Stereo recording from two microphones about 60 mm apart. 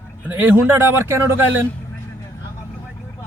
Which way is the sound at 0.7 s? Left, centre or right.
Right.